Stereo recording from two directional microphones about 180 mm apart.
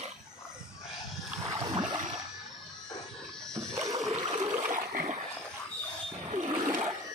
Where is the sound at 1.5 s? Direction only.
25° right (ahead or behind).